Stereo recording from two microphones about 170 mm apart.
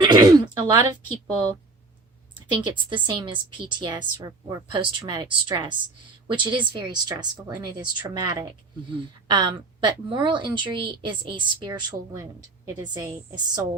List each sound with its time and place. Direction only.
0.0 s speech: 25° right (ahead or behind)
2.7 s speech: 30° right (ahead or behind)